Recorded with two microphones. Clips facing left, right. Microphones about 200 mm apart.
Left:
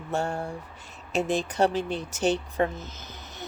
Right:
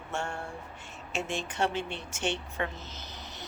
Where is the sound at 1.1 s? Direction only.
40° left (ahead or behind).